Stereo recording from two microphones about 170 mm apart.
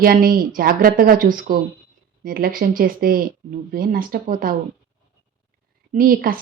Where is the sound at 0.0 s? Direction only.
55° right (ahead or behind).